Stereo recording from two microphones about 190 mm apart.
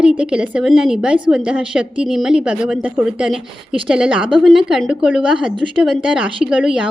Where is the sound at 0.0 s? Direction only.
5° right (ahead or behind).